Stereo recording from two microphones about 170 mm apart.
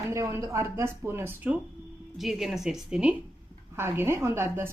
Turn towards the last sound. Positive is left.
turn(degrees=-15)  # may be behind; listen again after turning